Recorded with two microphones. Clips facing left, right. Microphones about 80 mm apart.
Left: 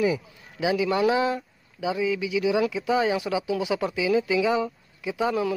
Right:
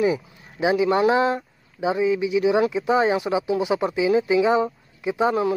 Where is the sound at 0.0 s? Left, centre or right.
Right.